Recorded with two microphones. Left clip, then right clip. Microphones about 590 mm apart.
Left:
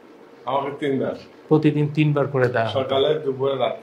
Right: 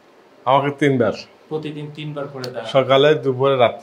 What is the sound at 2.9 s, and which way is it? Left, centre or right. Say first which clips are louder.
Speech: right 6 dB; right.